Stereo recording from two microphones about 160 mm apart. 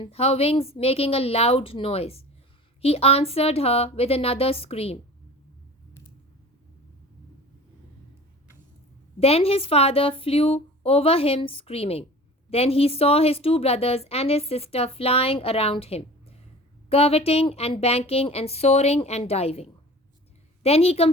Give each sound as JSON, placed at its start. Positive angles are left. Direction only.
{"t": 0.0, "sound": "a woman's voice", "side_deg": 40}
{"t": 9.2, "sound": "a woman's voice", "side_deg": 40}